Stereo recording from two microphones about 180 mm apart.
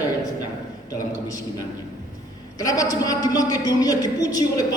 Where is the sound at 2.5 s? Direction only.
20° left (ahead or behind).